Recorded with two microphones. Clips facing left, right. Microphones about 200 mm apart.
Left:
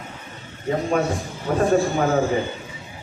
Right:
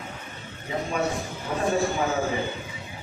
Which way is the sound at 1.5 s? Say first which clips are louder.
Left 9 dB; 55° left (ahead or behind).